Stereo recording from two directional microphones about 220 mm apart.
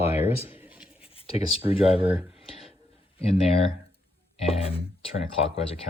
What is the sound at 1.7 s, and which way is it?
Speech, 5° right (ahead or behind).